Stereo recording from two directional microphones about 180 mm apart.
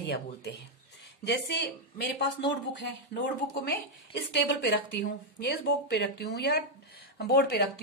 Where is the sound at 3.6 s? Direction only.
70° left (ahead or behind).